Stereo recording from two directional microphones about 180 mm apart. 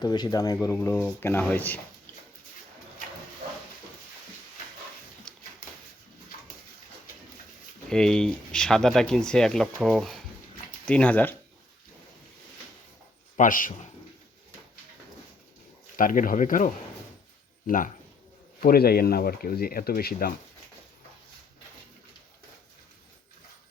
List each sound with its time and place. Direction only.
0.0 s speech: 25° left (ahead or behind)
5.3 s a sound: 5° left (ahead or behind)
7.9 s speech: 5° left (ahead or behind)
13.3 s speech: 45° left (ahead or behind)
16.0 s speech: 50° left (ahead or behind)